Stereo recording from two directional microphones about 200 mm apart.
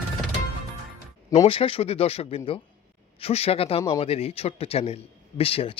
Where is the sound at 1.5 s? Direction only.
25° left (ahead or behind).